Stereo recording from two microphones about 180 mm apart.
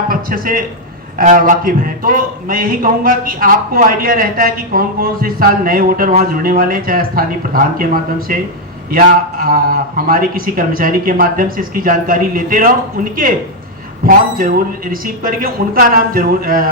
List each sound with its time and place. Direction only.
0.1 s a man's voice: 50° right (ahead or behind)
14.1 s speech: 50° right (ahead or behind)